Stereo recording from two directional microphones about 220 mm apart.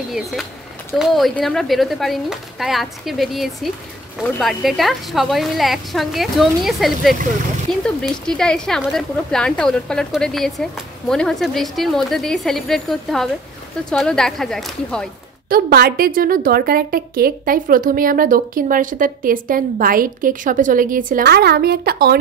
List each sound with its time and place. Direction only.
0.1 s a woman's voice: centre (ahead or behind)
15.5 s a woman's voice: 45° right (ahead or behind)